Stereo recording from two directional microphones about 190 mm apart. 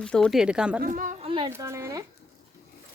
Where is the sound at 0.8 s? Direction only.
40° right (ahead or behind).